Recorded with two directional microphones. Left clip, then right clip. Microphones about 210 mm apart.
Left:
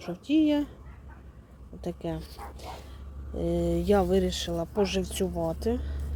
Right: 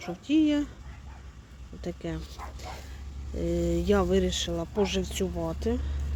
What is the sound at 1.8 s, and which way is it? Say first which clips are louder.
Speech: left 2 dB; 5° left (ahead or behind).